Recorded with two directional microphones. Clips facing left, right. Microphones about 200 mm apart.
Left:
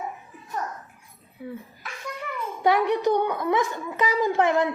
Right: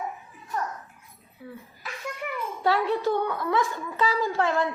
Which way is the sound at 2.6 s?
15° left (ahead or behind).